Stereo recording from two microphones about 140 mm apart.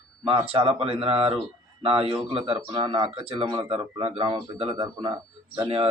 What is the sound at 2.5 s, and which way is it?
A man's voice, 30° right (ahead or behind).